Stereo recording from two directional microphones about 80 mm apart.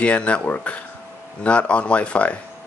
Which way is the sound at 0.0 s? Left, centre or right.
Centre.